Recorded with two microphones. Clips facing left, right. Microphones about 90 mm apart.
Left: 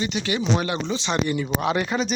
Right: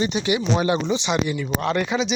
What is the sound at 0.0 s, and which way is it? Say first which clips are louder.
Speech: right 3 dB; 25° right (ahead or behind).